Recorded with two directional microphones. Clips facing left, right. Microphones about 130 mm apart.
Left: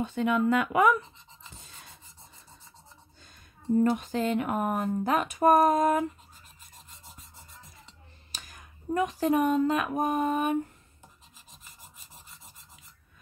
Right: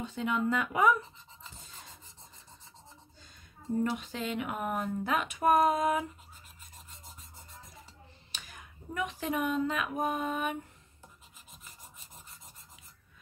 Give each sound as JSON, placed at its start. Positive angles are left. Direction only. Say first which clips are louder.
{"t": 0.0, "sound": "speech", "louder": "left 6 dB", "side_deg": 60}
{"t": 3.9, "sound": "speech", "louder": "left 7 dB", "side_deg": 45}
{"t": 8.3, "sound": "a sound", "louder": "left 2 dB", "side_deg": 40}